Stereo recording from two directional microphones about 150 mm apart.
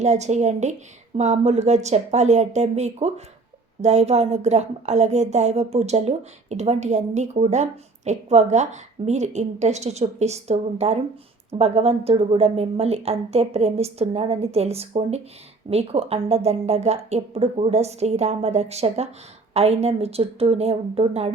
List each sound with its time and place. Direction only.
0.0 s a woman's voice: 50° right (ahead or behind)